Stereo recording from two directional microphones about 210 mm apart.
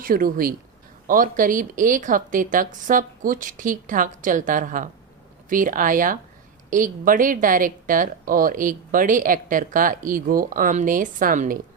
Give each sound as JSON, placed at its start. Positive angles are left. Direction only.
{"t": 0.0, "sound": "speech", "side_deg": -40}